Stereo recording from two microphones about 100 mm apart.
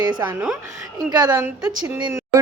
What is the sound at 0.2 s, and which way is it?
Speech, 15° right (ahead or behind).